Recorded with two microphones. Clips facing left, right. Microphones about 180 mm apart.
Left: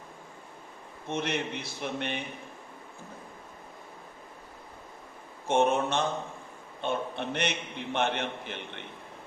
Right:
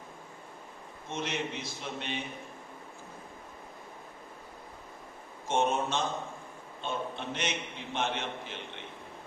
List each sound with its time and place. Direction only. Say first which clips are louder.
1.1 s a man's voice: left 3 dB; 60° left (ahead or behind)
5.5 s a man's voice: left 4 dB; 60° left (ahead or behind)